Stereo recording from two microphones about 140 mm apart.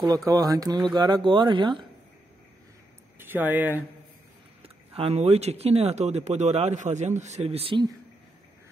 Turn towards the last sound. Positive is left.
turn(degrees=-40)  # may be behind; listen again after turning